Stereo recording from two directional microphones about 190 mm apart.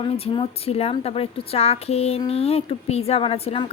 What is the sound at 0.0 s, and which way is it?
A woman's voice, 30° left (ahead or behind).